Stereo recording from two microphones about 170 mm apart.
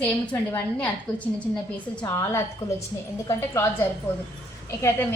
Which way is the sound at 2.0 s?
15° left (ahead or behind).